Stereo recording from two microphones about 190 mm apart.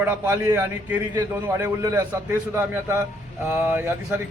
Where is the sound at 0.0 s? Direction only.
10° right (ahead or behind).